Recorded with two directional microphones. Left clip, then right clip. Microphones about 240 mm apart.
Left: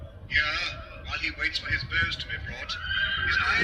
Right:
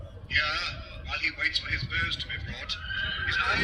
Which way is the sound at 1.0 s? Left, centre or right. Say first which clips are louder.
Right 1 dB; centre.